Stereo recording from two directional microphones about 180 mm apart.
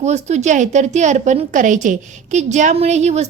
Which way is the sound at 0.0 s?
40° right (ahead or behind).